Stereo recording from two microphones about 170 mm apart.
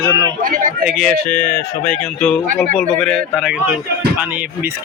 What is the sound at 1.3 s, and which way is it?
A man's voice, 15° left (ahead or behind).